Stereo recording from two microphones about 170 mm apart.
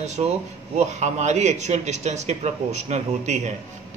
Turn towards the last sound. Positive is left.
turn(degrees=-45)  # may be behind; listen again after turning